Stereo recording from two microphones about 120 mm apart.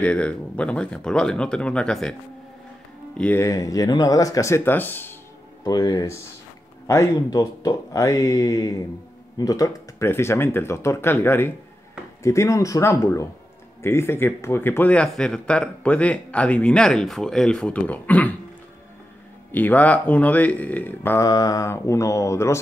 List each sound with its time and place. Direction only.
0.0 s speech: 10° left (ahead or behind)
3.3 s speech: 25° left (ahead or behind)
5.6 s speech: 30° left (ahead or behind); by 18.3 s 10° left (ahead or behind)
19.5 s speech: 15° left (ahead or behind)
21.3 s speech: 30° left (ahead or behind)